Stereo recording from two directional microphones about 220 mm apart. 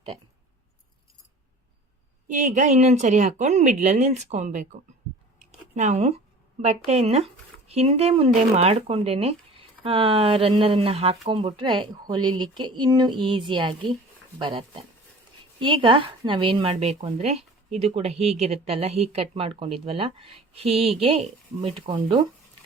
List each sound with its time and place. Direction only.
2.2 s speech: 35° right (ahead or behind)
5.4 s a sound: 30° right (ahead or behind)
6.6 s speech: 30° right (ahead or behind)